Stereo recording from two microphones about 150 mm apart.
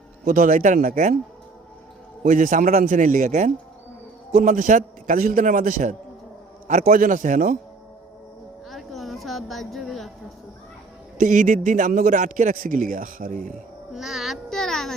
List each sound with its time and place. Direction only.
0.3 s a man's voice: 65° right (ahead or behind)
2.2 s a man's voice: 65° right (ahead or behind)
4.3 s a man's voice: 70° right (ahead or behind)
8.7 s a sound: centre (ahead or behind)
11.2 s a man's voice: 60° right (ahead or behind)
13.9 s child singing: centre (ahead or behind)